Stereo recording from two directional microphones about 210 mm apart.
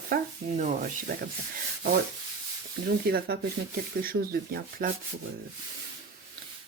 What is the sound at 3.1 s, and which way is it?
Speech, 45° right (ahead or behind).